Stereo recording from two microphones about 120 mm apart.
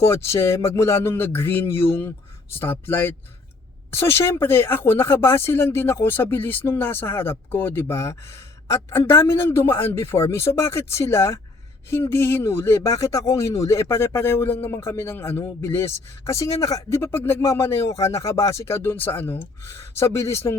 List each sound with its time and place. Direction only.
0.0 s speech: 25° left (ahead or behind)